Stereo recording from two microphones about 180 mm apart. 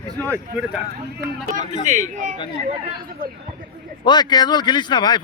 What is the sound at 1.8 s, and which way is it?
Speech, 45° right (ahead or behind).